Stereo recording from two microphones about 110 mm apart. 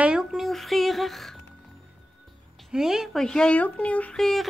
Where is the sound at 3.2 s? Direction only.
5° left (ahead or behind).